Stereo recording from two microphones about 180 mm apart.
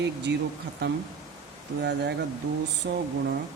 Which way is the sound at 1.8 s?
75° right (ahead or behind).